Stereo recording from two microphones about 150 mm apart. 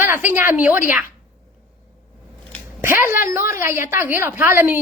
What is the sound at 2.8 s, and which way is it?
A woman's voice, 15° right (ahead or behind).